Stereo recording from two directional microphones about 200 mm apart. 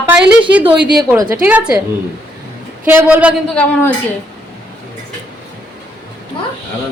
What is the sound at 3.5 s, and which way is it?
Speech, 5° left (ahead or behind).